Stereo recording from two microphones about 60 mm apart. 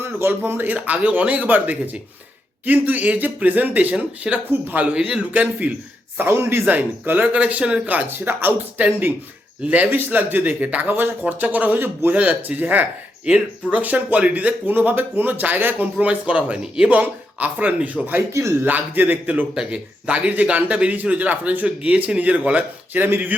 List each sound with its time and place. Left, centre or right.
0.0 s a man's voice: right
4.9 s a man's voice: centre
6.1 s a man's voice: right
6.7 s a man's voice: right
18.3 s a man's voice: right
18.6 s a man's voice: right